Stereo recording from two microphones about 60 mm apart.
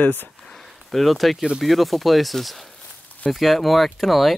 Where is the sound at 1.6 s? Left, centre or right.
Centre.